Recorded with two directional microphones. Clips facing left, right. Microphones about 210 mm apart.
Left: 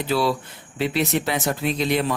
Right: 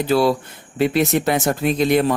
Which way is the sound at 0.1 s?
45° right (ahead or behind).